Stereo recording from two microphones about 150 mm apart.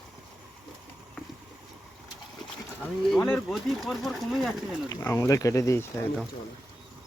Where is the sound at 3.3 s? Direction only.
Centre (ahead or behind).